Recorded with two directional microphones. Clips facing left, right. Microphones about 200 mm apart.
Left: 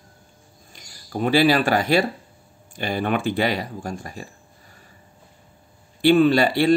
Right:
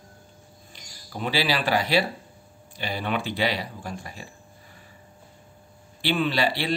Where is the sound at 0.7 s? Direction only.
45° left (ahead or behind).